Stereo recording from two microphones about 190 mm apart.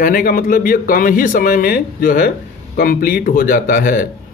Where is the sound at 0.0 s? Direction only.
50° left (ahead or behind).